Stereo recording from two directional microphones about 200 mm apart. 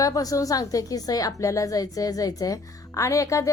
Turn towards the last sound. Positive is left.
turn(degrees=15)  # may be behind; listen again after turning